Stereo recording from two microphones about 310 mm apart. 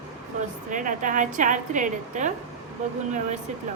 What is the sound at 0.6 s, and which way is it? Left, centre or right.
A woman's voice, right.